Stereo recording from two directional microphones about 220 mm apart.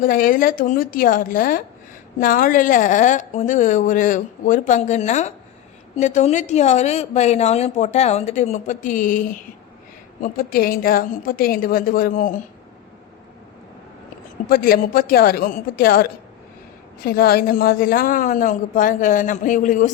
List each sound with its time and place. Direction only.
0.0 s a woman's voice: 40° left (ahead or behind)
14.5 s a woman's voice: 40° left (ahead or behind)